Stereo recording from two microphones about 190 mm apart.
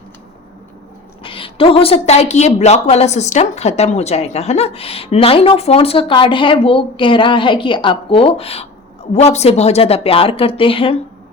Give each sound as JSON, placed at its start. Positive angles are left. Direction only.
{"t": 1.2, "sound": "a woman's voice", "side_deg": 30}